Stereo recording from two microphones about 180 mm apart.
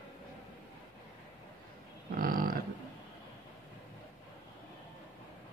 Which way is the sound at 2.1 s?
55° right (ahead or behind).